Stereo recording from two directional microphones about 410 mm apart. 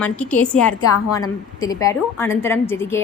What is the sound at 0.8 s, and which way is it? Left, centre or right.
Speech, left.